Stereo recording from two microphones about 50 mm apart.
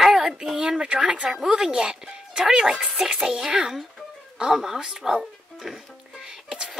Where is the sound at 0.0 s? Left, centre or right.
Centre.